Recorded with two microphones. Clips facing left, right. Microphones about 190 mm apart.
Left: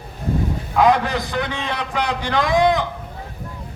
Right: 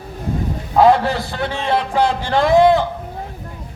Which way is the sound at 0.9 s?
20° left (ahead or behind).